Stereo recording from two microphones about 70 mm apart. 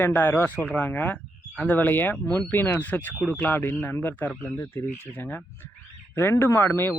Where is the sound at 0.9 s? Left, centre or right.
Left.